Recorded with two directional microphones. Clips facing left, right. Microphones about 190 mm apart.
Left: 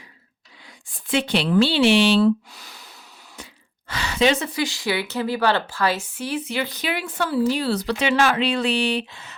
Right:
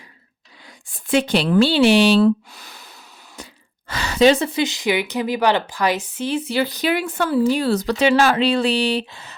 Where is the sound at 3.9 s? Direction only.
40° right (ahead or behind).